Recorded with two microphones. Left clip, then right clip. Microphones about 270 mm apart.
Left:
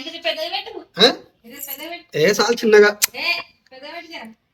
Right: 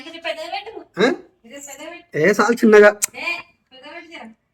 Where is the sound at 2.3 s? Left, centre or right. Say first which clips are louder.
Right 2 dB; centre.